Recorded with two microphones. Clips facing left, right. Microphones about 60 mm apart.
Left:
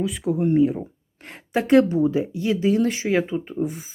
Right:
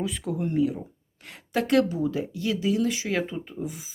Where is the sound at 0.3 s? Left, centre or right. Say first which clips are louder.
Left 7 dB; left.